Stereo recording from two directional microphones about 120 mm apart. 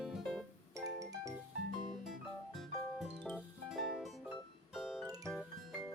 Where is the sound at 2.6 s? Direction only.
Centre (ahead or behind).